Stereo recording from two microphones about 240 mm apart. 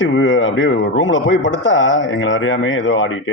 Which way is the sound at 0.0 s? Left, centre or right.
Left.